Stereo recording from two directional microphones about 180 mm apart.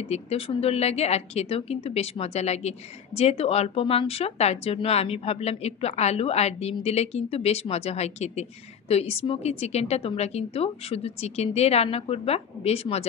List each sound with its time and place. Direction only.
0.1 s speech: 35° left (ahead or behind)